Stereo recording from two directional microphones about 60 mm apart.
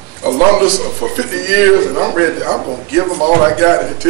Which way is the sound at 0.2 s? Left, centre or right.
Right.